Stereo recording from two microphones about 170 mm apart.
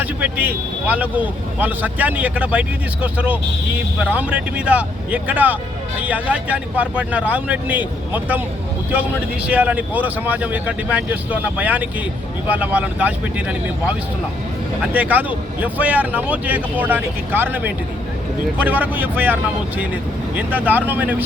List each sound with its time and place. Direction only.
0.0 s speech: 10° right (ahead or behind)
14.9 s speech: 10° right (ahead or behind)